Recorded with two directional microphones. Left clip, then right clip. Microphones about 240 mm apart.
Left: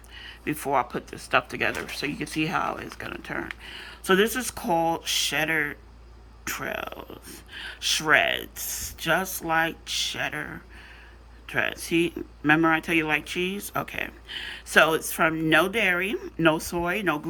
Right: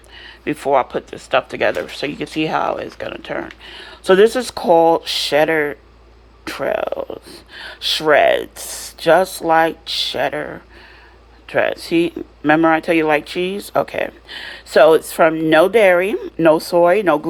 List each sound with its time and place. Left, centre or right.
0.2 s speech: centre